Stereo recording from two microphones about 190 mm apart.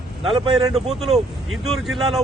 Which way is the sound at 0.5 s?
Centre (ahead or behind).